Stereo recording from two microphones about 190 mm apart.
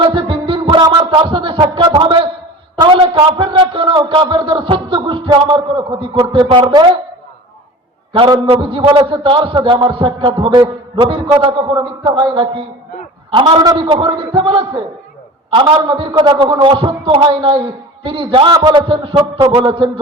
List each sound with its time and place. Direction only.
0.0 s music: 25° right (ahead or behind)
2.8 s a man's voice: 25° right (ahead or behind)
8.1 s a man's voice: 25° right (ahead or behind)